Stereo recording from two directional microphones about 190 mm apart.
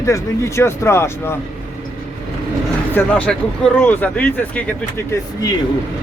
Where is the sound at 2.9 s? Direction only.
10° left (ahead or behind).